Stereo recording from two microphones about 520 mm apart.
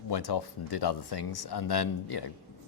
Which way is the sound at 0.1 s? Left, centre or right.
Left.